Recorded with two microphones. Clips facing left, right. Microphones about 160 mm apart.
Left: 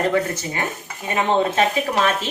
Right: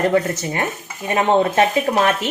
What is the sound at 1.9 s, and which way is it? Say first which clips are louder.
Speech: right 3 dB; 30° right (ahead or behind).